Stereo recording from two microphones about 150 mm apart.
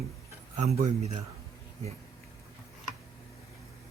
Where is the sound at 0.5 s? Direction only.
55° right (ahead or behind).